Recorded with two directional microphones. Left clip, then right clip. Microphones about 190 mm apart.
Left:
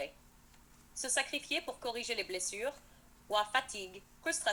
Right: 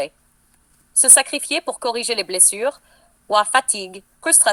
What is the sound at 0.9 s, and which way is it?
A woman's voice, 45° right (ahead or behind).